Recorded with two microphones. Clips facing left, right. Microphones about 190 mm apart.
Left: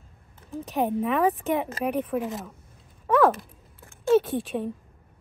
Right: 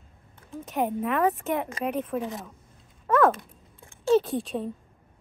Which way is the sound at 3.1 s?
Centre (ahead or behind).